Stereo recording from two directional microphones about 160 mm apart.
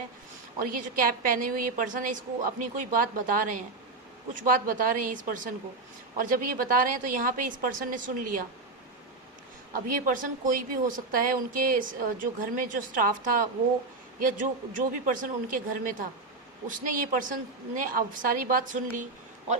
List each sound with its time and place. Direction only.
0.6 s a woman's voice: 60° right (ahead or behind)
9.7 s a woman's voice: 60° right (ahead or behind)